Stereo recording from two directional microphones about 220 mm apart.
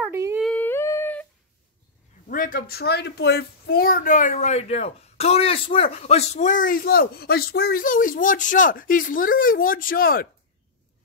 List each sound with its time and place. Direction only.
0.0 s humming: 10° right (ahead or behind)
0.5 s humming: 10° left (ahead or behind)
2.2 s speech: 40° left (ahead or behind)